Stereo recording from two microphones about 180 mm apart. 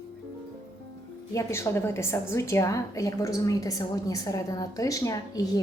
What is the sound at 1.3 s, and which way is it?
A woman's voice, 15° left (ahead or behind).